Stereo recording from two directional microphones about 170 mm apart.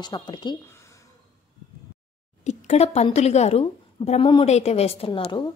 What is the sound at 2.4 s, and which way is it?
A woman's voice, 40° left (ahead or behind).